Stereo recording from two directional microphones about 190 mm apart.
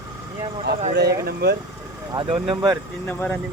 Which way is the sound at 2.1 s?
25° right (ahead or behind).